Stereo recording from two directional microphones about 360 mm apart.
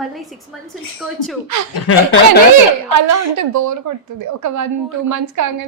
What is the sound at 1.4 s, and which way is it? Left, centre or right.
Speech, right.